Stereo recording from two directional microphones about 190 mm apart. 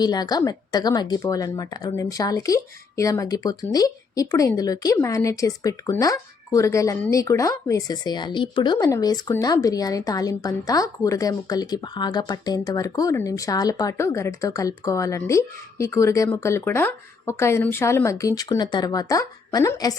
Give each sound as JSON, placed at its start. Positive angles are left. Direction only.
{"t": 0.0, "sound": "speech", "side_deg": 20}